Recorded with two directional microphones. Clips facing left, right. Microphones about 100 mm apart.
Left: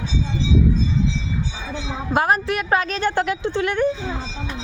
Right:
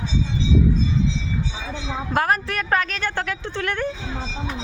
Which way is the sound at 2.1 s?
15° left (ahead or behind).